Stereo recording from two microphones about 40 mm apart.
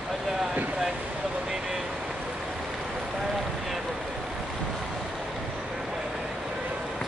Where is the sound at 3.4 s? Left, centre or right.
Centre.